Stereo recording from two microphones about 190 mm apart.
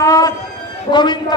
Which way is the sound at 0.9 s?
20° left (ahead or behind).